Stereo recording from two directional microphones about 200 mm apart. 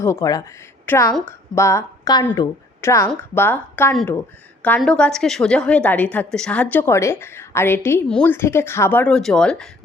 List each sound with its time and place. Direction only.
0.0 s a woman's voice: 15° left (ahead or behind)